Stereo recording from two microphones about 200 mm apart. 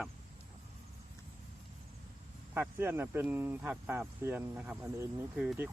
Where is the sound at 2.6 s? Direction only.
10° right (ahead or behind).